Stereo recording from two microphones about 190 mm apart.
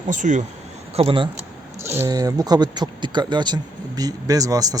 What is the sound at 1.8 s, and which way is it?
Speech, 15° right (ahead or behind).